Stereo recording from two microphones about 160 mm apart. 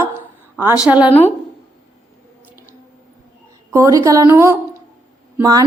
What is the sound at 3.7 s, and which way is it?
A woman's voice, 20° right (ahead or behind).